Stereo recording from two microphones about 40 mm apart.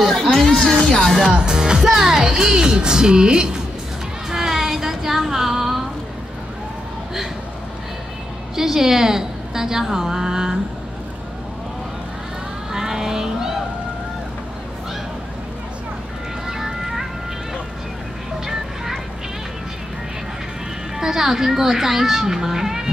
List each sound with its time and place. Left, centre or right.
0.0 s music: centre
1.3 s speech: centre
4.3 s music: centre
8.5 s speech: centre
12.7 s a sound: centre
16.4 s music: centre
21.0 s speech: centre